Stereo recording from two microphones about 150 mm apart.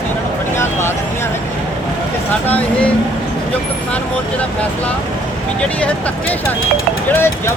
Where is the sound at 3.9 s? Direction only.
10° left (ahead or behind).